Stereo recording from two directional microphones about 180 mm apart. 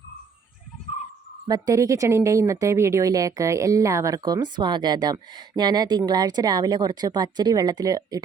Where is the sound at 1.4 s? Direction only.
20° right (ahead or behind).